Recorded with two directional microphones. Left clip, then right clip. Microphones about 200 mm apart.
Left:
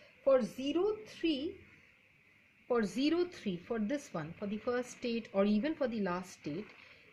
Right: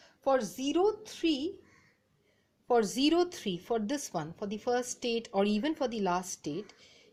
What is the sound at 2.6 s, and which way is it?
A woman's voice, 25° right (ahead or behind).